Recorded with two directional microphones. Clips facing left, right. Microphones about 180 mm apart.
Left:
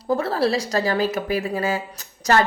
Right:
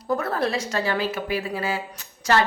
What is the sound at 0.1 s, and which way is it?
A woman's voice, 30° left (ahead or behind).